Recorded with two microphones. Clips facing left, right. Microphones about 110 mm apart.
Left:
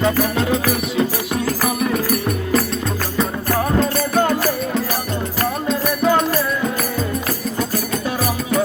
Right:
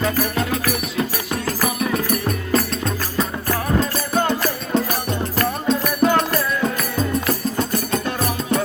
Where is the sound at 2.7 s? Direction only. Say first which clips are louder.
Left 1 dB; 15° left (ahead or behind).